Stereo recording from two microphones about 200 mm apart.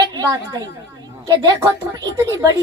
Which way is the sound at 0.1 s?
20° right (ahead or behind).